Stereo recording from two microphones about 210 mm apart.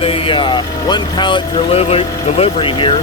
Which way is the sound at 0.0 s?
25° left (ahead or behind).